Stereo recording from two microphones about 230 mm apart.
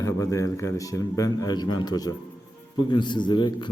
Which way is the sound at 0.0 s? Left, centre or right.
Centre.